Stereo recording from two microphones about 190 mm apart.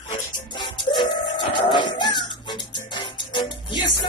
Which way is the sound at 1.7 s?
25° left (ahead or behind).